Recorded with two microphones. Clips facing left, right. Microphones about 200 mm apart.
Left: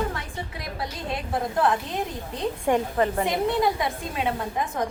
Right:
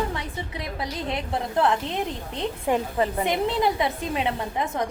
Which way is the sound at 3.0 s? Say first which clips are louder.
Even; 20° right (ahead or behind).